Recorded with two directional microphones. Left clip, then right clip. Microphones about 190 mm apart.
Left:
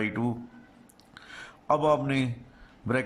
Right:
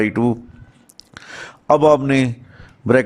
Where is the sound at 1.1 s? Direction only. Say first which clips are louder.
Right 10 dB; 30° right (ahead or behind).